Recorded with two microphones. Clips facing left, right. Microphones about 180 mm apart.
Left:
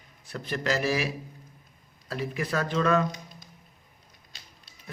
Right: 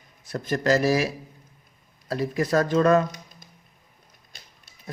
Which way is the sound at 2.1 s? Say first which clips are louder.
Right 7 dB; 40° right (ahead or behind).